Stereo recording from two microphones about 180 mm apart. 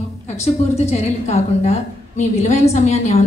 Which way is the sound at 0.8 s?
35° left (ahead or behind).